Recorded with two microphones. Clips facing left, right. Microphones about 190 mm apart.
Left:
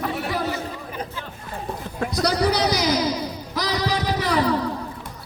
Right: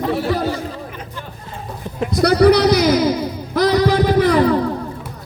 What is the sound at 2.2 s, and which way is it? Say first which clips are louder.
Music: right 10 dB; 60° right (ahead or behind).